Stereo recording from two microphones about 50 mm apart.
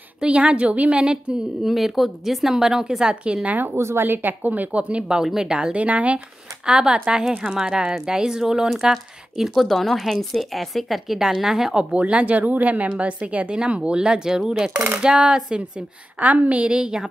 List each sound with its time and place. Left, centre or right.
0.2 s speech: right
1.6 s speech: centre
3.4 s a woman's voice: right
3.7 s a woman's voice: right
4.0 s a woman's voice: right
5.0 s speech: centre; by 6.2 s right
6.6 s speech: centre
16.2 s speech: right